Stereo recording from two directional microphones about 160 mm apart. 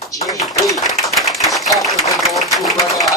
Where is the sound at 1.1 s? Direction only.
Centre (ahead or behind).